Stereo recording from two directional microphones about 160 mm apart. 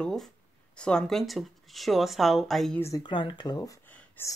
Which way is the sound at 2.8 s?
25° left (ahead or behind).